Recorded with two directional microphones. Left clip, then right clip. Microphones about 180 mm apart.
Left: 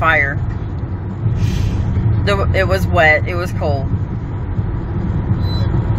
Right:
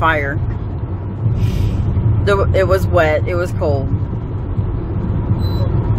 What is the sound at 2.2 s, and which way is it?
Speech, 15° right (ahead or behind).